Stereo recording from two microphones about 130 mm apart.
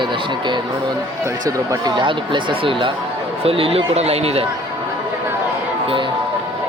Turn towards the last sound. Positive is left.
turn(degrees=-40)  # may be behind; listen again after turning